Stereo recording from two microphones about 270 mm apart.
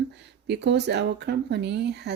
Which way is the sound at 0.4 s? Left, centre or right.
Right.